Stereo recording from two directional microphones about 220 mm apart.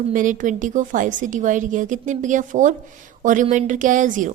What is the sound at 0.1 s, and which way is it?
A woman's voice, 35° right (ahead or behind).